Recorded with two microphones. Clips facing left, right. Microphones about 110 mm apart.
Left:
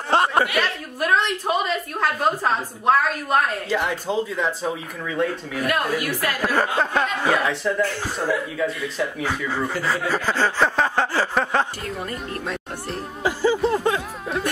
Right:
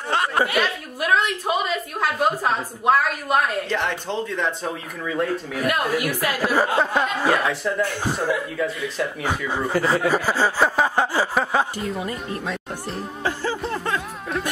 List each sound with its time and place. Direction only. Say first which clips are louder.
0.1 s a sound: left 3 dB; 30° left (ahead or behind)
0.6 s a woman's voice: even; 5° right (ahead or behind)
3.6 s a woman's voice: left 1 dB; 5° left (ahead or behind)
7.8 s speech: right 1 dB; 15° right (ahead or behind)
8.5 s a woman's voice: even; centre (ahead or behind)
9.5 s speech: right 6 dB; 15° right (ahead or behind)
13.2 s music: left 6 dB; 10° left (ahead or behind)